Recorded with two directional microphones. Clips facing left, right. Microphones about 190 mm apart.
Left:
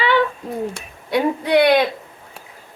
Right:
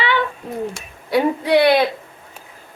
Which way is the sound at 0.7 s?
5° right (ahead or behind).